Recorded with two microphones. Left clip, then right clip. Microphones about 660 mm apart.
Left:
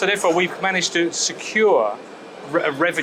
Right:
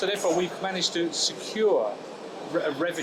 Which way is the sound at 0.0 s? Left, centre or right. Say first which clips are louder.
Left 7 dB; left.